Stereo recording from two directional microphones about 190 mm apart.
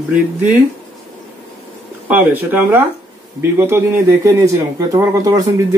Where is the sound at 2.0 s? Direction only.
10° right (ahead or behind).